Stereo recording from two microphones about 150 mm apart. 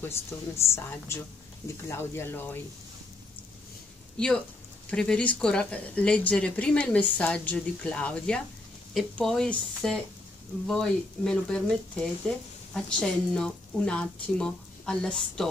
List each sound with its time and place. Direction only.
0.0 s speech: 15° left (ahead or behind)
4.9 s speech: 5° left (ahead or behind)